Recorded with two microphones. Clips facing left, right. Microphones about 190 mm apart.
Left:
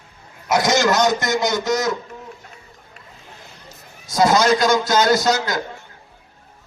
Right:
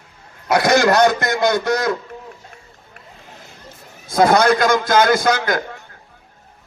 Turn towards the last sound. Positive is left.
turn(degrees=-55)  # may be behind; listen again after turning